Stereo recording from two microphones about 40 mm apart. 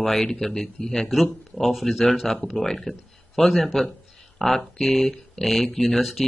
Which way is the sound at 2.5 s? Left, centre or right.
Centre.